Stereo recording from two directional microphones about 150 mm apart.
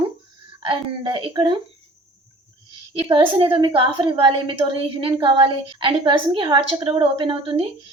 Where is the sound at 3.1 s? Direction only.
30° right (ahead or behind).